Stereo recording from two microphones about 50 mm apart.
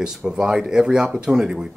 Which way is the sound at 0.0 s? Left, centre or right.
Centre.